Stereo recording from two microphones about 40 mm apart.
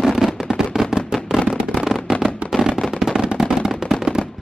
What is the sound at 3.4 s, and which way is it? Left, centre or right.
Gunshot, centre.